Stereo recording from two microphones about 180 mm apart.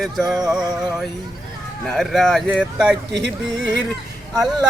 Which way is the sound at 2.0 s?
Centre (ahead or behind).